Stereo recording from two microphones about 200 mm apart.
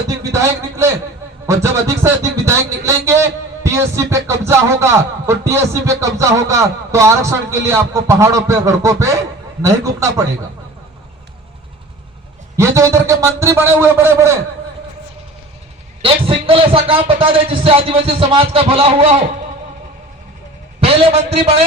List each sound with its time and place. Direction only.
0.3 s a man's voice: 15° right (ahead or behind)
12.5 s a man's voice: 15° right (ahead or behind)
16.0 s a man's voice: 25° right (ahead or behind)
20.8 s a man's voice: 30° right (ahead or behind)